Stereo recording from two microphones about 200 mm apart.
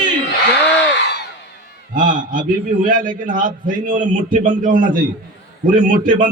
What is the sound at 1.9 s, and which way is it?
A man's voice, 40° right (ahead or behind).